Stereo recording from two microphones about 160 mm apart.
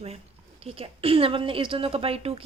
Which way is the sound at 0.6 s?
35° right (ahead or behind).